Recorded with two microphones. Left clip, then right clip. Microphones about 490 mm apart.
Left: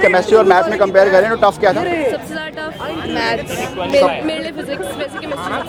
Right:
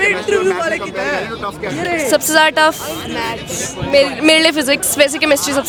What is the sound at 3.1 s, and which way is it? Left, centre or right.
Speech, centre.